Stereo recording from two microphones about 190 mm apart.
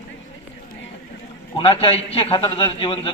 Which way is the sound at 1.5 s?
30° left (ahead or behind).